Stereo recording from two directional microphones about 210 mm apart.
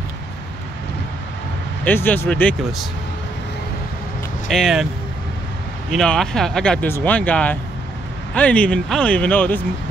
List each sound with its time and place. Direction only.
1.9 s speech: 10° left (ahead or behind)
4.5 s speech: centre (ahead or behind)
5.9 s speech: centre (ahead or behind)